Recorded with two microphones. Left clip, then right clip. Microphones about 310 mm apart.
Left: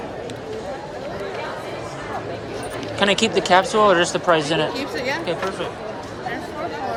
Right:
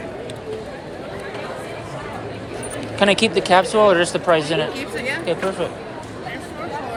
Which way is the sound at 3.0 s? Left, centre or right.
Centre.